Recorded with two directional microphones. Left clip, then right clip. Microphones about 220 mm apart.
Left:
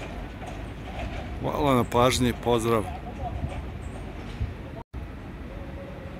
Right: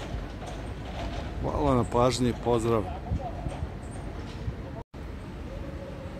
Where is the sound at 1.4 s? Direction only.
5° left (ahead or behind).